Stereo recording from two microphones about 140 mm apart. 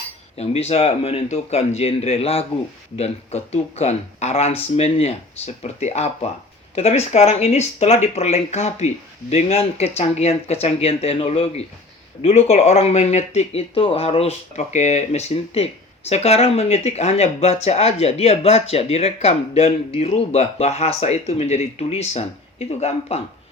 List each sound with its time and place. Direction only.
0.3 s speech: 50° left (ahead or behind)